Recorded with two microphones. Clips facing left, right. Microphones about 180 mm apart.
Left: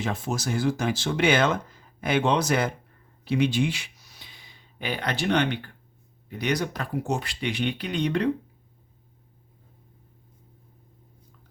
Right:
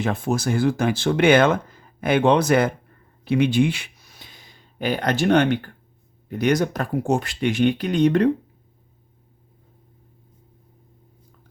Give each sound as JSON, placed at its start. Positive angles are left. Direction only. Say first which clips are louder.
{"t": 0.0, "sound": "speech", "louder": "right 6 dB", "side_deg": -55}